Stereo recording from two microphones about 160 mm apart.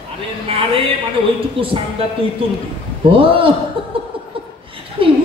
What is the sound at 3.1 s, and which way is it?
Speech, 35° right (ahead or behind).